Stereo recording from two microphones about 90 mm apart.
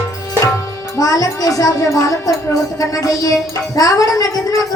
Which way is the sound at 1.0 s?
40° left (ahead or behind).